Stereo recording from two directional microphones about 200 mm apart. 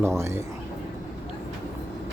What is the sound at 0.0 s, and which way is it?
Speech, 15° right (ahead or behind).